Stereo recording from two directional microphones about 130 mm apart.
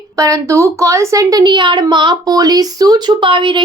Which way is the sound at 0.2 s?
25° right (ahead or behind).